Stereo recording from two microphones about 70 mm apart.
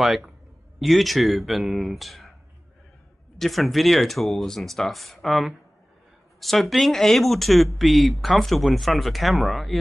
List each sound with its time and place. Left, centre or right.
0.0 s speech: centre
3.3 s speech: centre